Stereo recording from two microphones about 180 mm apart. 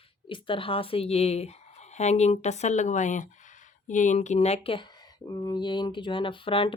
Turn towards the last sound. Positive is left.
turn(degrees=30)  # may be behind; listen again after turning